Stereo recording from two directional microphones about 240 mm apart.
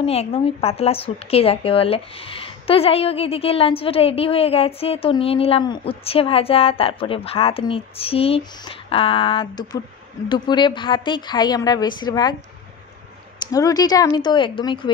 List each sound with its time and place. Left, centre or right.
0.0 s a woman's voice: left
13.4 s a woman's voice: centre